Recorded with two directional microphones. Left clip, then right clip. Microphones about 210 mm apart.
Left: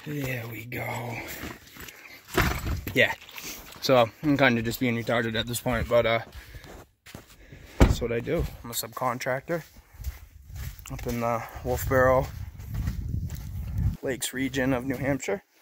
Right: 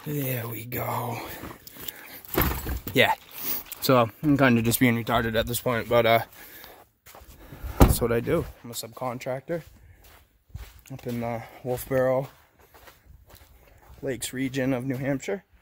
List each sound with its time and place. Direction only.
0.1 s speech: 20° right (ahead or behind)
2.9 s speech: 25° right (ahead or behind)
3.4 s a sound: 45° right (ahead or behind)
4.3 s speech: 45° right (ahead or behind)
5.0 s speech: 10° right (ahead or behind)
5.9 s speech: 25° right (ahead or behind)
7.9 s speech: 25° right (ahead or behind)
9.0 s speech: 5° left (ahead or behind)
11.1 s speech: 5° left (ahead or behind)
12.7 s a sound: 55° left (ahead or behind)
14.0 s speech: centre (ahead or behind)